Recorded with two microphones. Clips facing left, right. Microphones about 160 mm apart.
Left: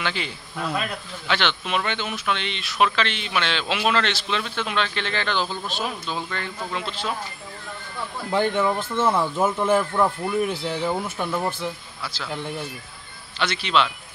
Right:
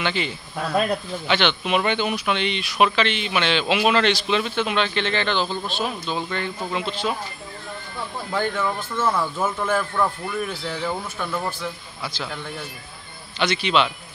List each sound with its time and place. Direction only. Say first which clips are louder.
0.0 s speech: right 3 dB; centre (ahead or behind)
8.3 s speech: left 3 dB; 25° left (ahead or behind)
13.4 s speech: right 2 dB; 5° right (ahead or behind)